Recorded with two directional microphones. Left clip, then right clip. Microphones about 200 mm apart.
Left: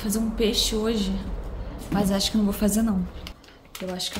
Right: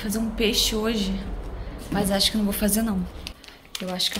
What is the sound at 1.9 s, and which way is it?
A woman's voice, 20° left (ahead or behind).